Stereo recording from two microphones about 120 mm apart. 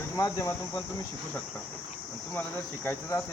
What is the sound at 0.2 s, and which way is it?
Speech, 25° left (ahead or behind).